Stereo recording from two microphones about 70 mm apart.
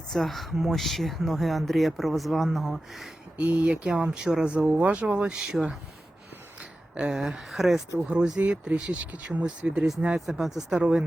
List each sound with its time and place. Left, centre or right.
0.1 s speech: centre
3.3 s speech: centre
6.9 s speech: centre